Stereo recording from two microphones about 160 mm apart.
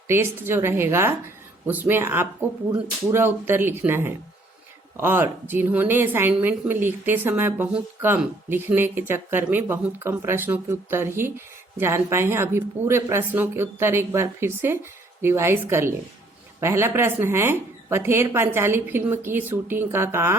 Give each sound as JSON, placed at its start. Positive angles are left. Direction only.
{"t": 0.1, "sound": "speech", "side_deg": -15}